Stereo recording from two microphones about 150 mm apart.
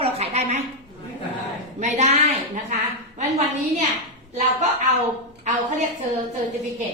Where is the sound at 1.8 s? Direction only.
50° right (ahead or behind).